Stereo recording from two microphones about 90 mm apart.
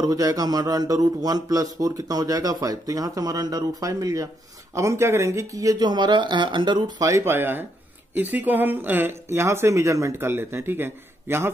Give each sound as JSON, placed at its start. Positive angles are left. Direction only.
{"t": 0.0, "sound": "a man's voice", "side_deg": -45}
{"t": 5.8, "sound": "speech", "side_deg": -55}
{"t": 7.0, "sound": "speech", "side_deg": -35}